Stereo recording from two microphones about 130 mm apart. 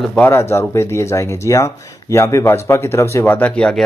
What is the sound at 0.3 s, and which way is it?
Speech, 20° left (ahead or behind).